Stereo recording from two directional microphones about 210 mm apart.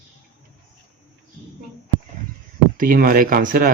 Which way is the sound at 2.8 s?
40° right (ahead or behind).